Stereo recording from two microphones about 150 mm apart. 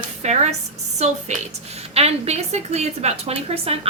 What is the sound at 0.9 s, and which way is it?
A woman's voice, 50° right (ahead or behind).